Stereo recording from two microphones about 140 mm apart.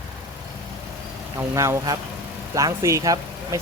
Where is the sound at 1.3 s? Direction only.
20° right (ahead or behind).